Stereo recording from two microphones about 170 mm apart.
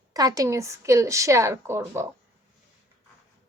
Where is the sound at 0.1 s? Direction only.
20° right (ahead or behind).